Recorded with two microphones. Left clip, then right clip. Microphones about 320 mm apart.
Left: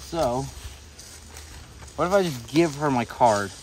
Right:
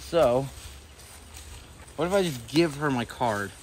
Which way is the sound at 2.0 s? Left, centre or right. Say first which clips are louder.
Left 4 dB; centre.